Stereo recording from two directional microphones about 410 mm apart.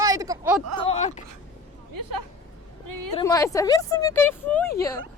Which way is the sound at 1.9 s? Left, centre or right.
Right.